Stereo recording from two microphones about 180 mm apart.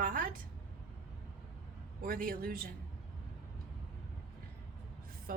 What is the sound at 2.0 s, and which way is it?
Speech, 55° right (ahead or behind).